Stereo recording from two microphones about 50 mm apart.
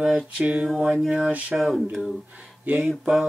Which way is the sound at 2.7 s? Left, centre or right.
Right.